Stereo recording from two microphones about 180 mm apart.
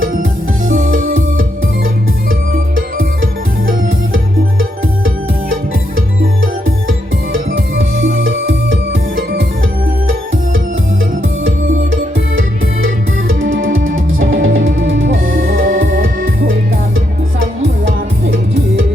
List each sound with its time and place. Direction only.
2.7 s music: 90° right
6.4 s music: 90° right
11.4 s music: 90° right
15.6 s music: 50° right (ahead or behind)